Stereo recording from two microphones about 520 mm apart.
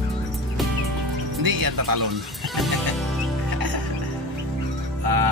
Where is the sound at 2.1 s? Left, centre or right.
Centre.